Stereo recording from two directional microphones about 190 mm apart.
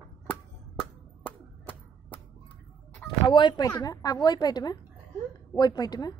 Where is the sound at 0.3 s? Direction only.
5° left (ahead or behind).